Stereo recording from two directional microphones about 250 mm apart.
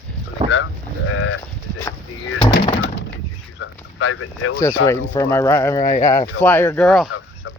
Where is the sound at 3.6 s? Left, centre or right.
Left.